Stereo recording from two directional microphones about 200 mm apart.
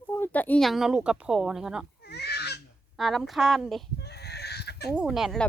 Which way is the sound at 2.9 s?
Centre (ahead or behind).